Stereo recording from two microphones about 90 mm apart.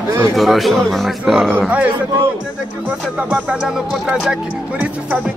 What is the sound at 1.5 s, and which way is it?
Speech, 15° right (ahead or behind).